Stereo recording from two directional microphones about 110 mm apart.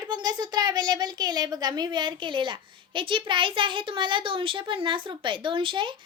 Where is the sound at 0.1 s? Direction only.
40° right (ahead or behind).